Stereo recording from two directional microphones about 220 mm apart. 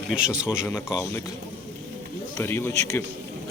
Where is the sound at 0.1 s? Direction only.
5° right (ahead or behind).